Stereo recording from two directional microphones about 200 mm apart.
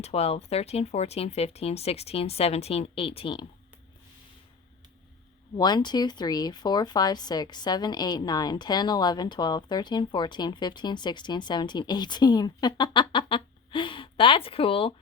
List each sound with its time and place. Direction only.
0.0 s speech: 30° left (ahead or behind)
5.5 s speech: 20° left (ahead or behind)